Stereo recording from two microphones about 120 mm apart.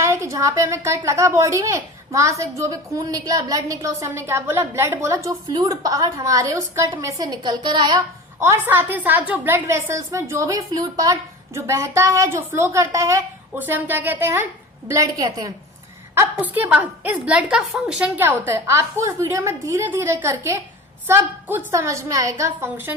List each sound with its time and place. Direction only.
0.0 s a woman's voice: 25° right (ahead or behind)
8.4 s a woman's voice: 20° right (ahead or behind)
14.8 s a woman's voice: 30° right (ahead or behind)
16.4 s a woman's voice: 15° right (ahead or behind)